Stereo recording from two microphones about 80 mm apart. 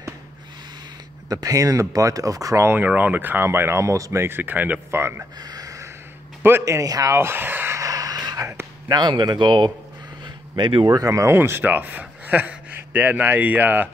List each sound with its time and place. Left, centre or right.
1.3 s speech: right
2.7 s speech: right
5.4 s a sound: right
6.6 s speech: right
7.2 s speech: right
7.7 s a sound: right
8.8 s speech: right
10.2 s a sound: right
11.0 s speech: right
11.3 s speech: right